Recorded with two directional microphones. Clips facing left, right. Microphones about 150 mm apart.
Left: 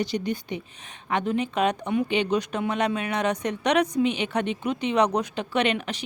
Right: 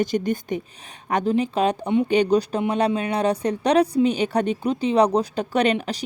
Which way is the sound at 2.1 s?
40° right (ahead or behind).